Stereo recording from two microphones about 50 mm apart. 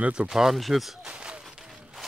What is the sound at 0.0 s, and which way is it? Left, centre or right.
Speech, right.